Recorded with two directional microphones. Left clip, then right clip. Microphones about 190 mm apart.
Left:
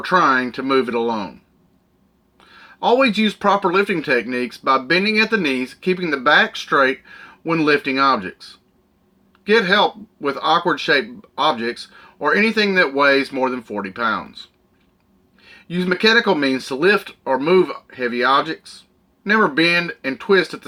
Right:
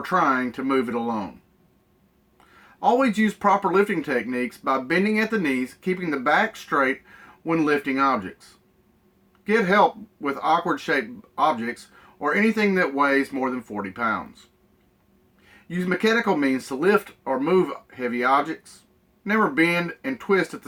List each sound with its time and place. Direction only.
0.0 s speech: 5° left (ahead or behind)
2.8 s speech: 5° left (ahead or behind)
9.4 s speech: 10° left (ahead or behind)
15.7 s speech: 10° left (ahead or behind)